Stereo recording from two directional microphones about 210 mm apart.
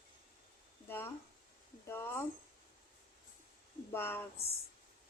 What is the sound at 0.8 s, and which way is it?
Speech, 10° left (ahead or behind).